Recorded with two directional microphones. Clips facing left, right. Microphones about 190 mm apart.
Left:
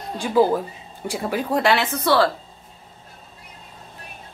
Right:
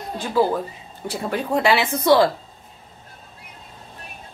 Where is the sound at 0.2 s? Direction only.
15° left (ahead or behind).